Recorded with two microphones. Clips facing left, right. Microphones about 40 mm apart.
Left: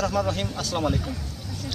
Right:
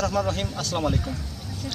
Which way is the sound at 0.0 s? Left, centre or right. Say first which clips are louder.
Even; centre.